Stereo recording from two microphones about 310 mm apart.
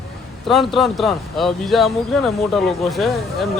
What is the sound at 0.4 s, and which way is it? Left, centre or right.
Speech, centre.